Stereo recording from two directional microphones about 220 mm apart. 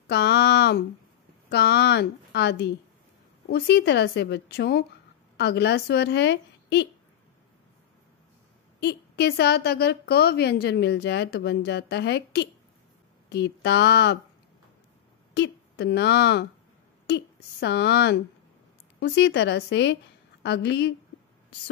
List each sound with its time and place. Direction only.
0.1 s a sound: 50° left (ahead or behind)
1.5 s a woman's voice: 50° left (ahead or behind)
8.7 s a woman's voice: 50° left (ahead or behind)
15.3 s a woman's voice: 50° left (ahead or behind)